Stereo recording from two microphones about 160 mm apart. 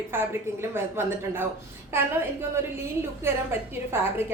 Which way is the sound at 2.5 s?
15° right (ahead or behind).